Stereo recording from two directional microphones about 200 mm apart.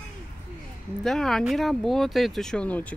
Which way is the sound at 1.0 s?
Centre (ahead or behind).